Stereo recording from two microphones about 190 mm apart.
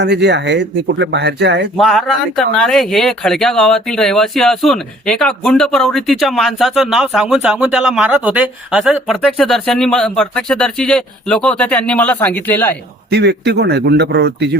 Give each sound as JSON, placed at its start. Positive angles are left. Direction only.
{"t": 0.0, "sound": "speech", "side_deg": -65}
{"t": 1.7, "sound": "speech", "side_deg": 0}
{"t": 13.1, "sound": "speech", "side_deg": -60}